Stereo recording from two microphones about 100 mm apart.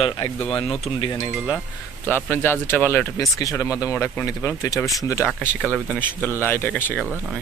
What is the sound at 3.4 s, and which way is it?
Speech, 30° left (ahead or behind).